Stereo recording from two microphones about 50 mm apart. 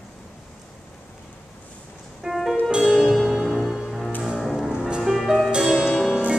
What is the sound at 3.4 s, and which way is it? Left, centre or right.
Music, centre.